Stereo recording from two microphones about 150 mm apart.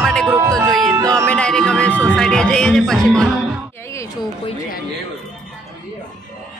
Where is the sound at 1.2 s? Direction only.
5° left (ahead or behind).